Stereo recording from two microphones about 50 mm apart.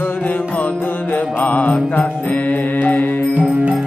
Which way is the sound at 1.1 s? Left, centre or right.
Left.